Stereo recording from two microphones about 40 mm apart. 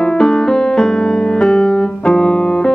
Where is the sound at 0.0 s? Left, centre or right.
Centre.